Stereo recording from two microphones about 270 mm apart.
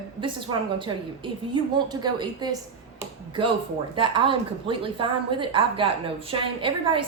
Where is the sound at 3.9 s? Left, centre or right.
Centre.